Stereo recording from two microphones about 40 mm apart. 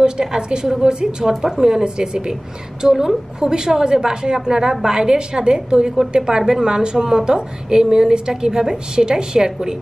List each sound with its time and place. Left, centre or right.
0.0 s a woman's voice: centre